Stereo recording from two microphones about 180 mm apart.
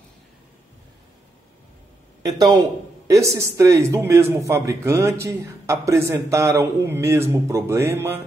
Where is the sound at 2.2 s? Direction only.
20° right (ahead or behind).